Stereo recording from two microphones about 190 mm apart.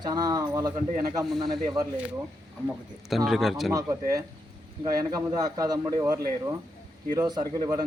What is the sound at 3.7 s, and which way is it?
Speech, 15° right (ahead or behind).